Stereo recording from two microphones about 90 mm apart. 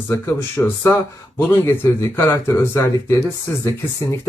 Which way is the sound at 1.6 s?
30° left (ahead or behind).